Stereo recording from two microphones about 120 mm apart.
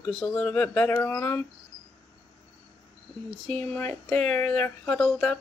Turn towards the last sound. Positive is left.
turn(degrees=10)  # may be behind; listen again after turning